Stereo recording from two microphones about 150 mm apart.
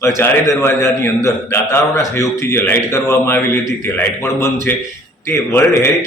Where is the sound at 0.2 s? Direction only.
20° left (ahead or behind).